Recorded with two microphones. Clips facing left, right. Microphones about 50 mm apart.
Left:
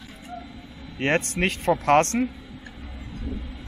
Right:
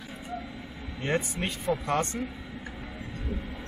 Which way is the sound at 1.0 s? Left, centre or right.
Left.